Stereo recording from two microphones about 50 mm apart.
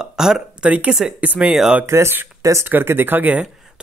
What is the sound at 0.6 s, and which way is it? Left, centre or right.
Speech, right.